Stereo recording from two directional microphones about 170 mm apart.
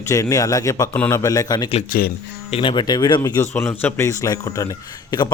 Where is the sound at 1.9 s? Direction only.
55° left (ahead or behind).